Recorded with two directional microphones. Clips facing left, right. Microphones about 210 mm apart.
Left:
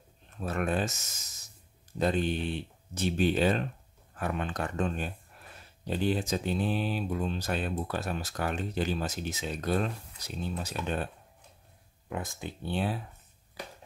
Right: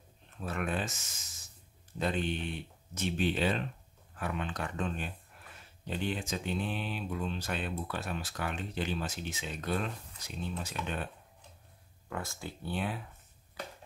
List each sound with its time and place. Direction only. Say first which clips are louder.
0.4 s speech: left 5 dB; 40° left (ahead or behind)
2.0 s speech: left 5 dB; 40° left (ahead or behind)
12.1 s speech: left 3 dB; 20° left (ahead or behind)